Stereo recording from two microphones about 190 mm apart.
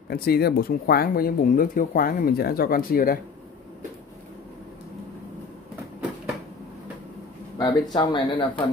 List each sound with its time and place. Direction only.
0.1 s speech: 55° left (ahead or behind)
7.5 s speech: 25° left (ahead or behind)